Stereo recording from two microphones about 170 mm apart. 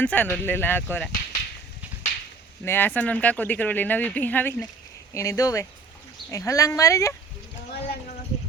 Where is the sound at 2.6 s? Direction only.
10° left (ahead or behind).